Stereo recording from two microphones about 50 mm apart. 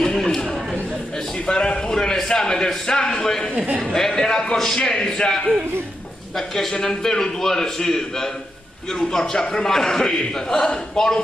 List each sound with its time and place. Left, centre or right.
0.0 s chatter: centre
1.4 s a man's voice: centre